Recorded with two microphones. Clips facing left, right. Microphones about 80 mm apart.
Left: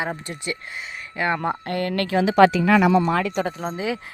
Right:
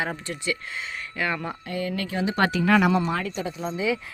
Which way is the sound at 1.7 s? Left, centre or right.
Left.